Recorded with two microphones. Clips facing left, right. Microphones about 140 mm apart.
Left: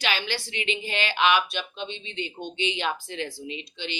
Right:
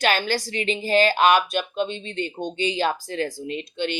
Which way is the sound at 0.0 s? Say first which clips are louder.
Right 7 dB; 45° right (ahead or behind).